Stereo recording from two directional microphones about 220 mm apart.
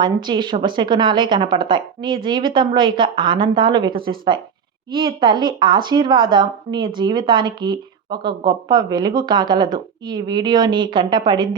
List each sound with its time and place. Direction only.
0.0 s a woman's voice: 20° right (ahead or behind)